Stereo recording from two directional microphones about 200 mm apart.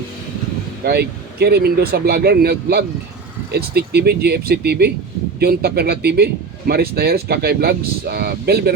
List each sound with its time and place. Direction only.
0.9 s a man's voice: 55° right (ahead or behind)